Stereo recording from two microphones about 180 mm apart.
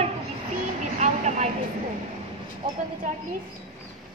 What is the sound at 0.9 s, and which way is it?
Vehicle, 40° right (ahead or behind).